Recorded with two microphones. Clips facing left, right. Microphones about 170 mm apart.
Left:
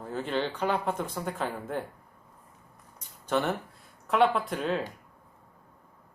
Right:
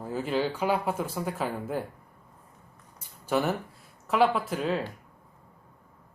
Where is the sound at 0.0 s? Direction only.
5° right (ahead or behind).